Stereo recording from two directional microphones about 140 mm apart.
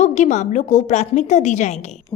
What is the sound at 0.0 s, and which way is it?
A woman's voice, 55° left (ahead or behind).